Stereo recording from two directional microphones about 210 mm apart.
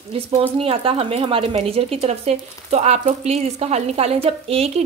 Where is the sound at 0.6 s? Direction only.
25° right (ahead or behind).